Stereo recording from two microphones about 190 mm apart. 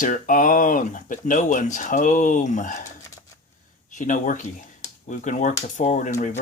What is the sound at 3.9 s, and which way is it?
Speech, 40° left (ahead or behind).